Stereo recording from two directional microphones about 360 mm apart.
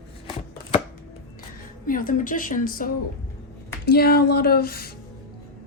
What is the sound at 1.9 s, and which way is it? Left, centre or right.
A woman's voice, left.